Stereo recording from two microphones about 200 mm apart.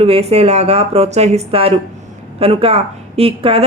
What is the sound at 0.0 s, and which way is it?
Speech, 30° right (ahead or behind).